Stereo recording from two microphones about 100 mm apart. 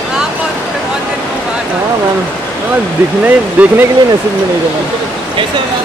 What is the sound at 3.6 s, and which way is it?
Speech, 15° right (ahead or behind).